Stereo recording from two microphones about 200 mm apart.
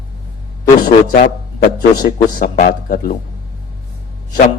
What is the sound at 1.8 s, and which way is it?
Speech, 45° left (ahead or behind).